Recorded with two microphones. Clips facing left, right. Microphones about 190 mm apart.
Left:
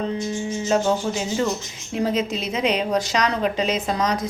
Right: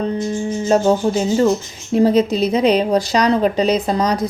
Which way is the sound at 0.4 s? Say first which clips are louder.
Right 6 dB; 35° right (ahead or behind).